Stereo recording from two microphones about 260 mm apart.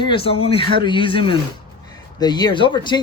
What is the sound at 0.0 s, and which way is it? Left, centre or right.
Speech, centre.